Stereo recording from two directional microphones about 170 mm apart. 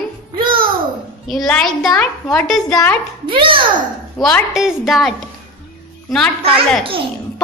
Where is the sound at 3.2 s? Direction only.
30° right (ahead or behind).